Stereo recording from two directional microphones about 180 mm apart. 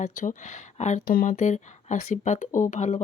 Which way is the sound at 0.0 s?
45° left (ahead or behind).